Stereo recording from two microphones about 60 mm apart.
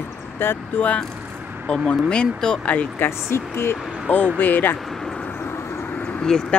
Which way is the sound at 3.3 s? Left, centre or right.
Left.